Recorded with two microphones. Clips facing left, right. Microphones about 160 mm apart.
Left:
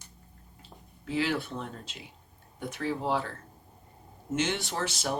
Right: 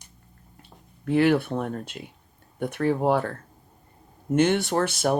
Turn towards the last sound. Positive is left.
turn(degrees=-55)  # may be behind; listen again after turning